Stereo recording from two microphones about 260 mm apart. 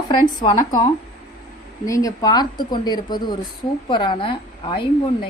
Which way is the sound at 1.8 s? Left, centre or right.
Centre.